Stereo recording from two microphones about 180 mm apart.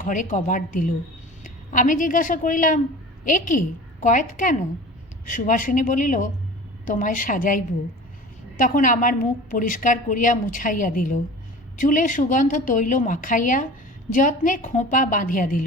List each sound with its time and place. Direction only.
0.0 s a woman's voice: 45° left (ahead or behind)